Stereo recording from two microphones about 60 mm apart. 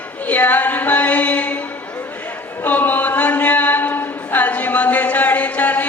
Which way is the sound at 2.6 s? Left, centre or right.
Left.